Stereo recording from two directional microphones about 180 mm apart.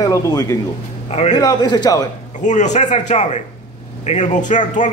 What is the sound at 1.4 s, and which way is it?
Speech, 20° left (ahead or behind).